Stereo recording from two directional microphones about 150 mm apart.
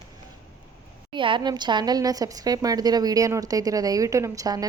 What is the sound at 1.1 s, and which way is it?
A woman's voice, 35° right (ahead or behind).